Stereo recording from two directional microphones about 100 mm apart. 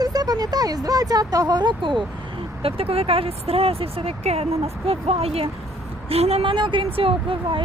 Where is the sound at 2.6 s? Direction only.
70° right (ahead or behind); by 6.5 s 90° right.